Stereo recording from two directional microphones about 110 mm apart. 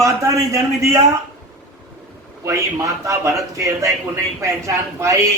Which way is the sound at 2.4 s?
30° right (ahead or behind).